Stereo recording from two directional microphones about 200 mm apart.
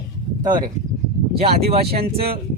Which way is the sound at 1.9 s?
50° right (ahead or behind).